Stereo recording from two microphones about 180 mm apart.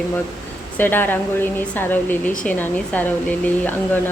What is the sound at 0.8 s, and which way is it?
Speech, 10° left (ahead or behind).